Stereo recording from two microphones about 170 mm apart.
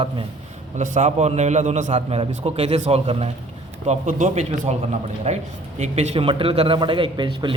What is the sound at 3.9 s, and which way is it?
A man's voice, 50° right (ahead or behind).